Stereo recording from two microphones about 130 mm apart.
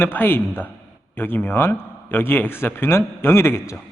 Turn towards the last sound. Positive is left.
turn(degrees=20)  # may be behind; listen again after turning